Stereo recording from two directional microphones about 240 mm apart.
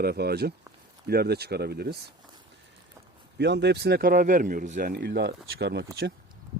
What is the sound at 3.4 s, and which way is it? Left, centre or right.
Speech, right.